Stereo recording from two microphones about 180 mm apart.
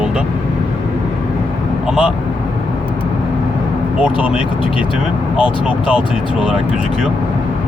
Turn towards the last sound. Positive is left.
turn(degrees=-5)  # may be behind; listen again after turning